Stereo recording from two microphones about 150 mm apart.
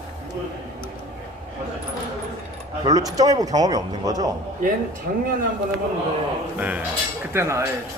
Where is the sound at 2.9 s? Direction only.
25° right (ahead or behind).